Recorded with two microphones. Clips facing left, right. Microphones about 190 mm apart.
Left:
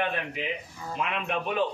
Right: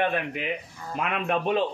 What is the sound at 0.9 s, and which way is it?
Speech, 50° right (ahead or behind).